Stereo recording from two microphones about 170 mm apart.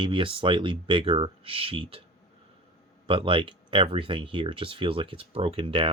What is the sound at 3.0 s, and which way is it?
Speech, 30° right (ahead or behind).